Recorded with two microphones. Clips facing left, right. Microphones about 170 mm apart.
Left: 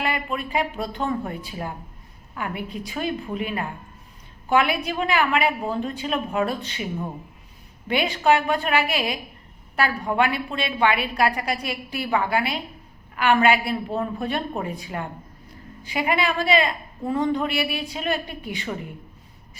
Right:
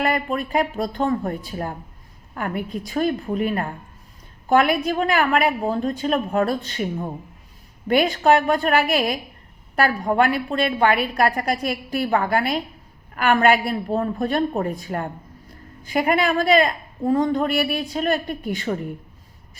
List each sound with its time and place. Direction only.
0.0 s a woman's voice: 45° right (ahead or behind)
7.9 s a woman's voice: 45° right (ahead or behind)